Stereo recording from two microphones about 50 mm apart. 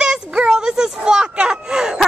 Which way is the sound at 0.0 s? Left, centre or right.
Centre.